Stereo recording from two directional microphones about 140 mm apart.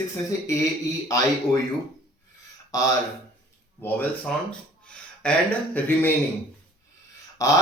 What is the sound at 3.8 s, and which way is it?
Speech, 15° left (ahead or behind).